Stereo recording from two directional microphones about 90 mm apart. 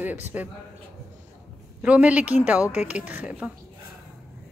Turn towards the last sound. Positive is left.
turn(degrees=-15)  # may be behind; listen again after turning